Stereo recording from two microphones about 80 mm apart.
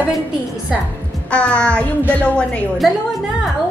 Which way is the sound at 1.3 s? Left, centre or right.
Centre.